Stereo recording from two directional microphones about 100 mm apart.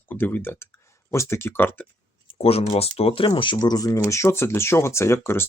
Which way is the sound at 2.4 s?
85° left.